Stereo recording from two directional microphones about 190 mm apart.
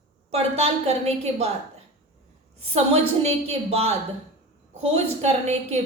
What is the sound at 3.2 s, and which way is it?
Speech, 35° right (ahead or behind).